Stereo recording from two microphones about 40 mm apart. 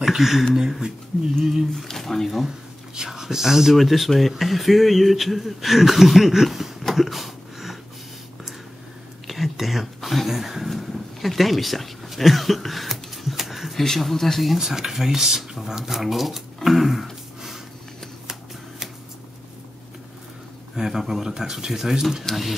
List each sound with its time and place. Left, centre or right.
0.0 s speech: centre
1.9 s speech: centre
2.9 s speech: centre
7.0 s a sound: centre
9.3 s a sound: centre
13.7 s speech: centre
14.6 s speech: centre
16.6 s a sound: centre
20.7 s speech: centre